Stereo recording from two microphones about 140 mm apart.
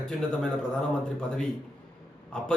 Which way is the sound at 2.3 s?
5° left (ahead or behind).